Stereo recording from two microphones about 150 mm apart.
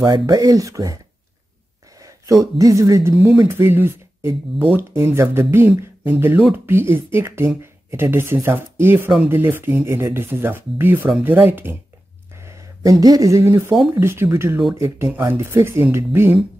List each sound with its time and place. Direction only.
0.0 s speech: 25° right (ahead or behind)
12.4 s a sound: 20° right (ahead or behind)
13.0 s speech: 20° right (ahead or behind)